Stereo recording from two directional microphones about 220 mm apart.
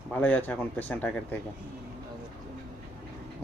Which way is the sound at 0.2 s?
10° left (ahead or behind).